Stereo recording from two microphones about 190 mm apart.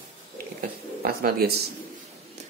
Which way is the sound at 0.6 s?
50° right (ahead or behind).